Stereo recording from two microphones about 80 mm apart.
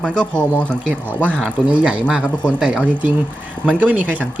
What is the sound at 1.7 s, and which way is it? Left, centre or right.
Speech, centre.